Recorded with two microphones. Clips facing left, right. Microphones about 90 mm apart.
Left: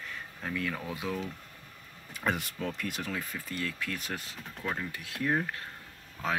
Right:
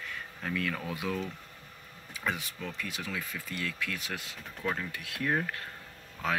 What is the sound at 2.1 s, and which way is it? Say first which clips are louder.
Speech: left 3 dB; 50° left (ahead or behind).